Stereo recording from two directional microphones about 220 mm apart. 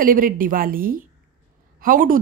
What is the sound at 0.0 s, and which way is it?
A woman's voice, 40° right (ahead or behind).